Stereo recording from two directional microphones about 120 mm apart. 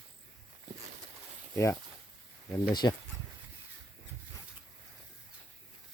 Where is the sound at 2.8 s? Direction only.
30° left (ahead or behind).